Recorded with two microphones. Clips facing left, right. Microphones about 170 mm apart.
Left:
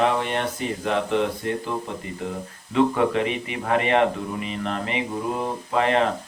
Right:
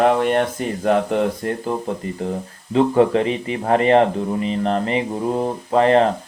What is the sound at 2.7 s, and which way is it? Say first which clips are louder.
Speech: right 5 dB; 35° right (ahead or behind).